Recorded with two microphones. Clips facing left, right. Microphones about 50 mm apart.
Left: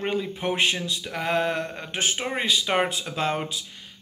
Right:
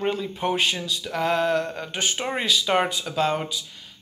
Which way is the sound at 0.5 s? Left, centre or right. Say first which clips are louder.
Even; left.